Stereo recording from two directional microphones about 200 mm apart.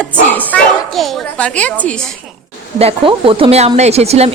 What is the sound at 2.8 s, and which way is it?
Speech, 30° right (ahead or behind).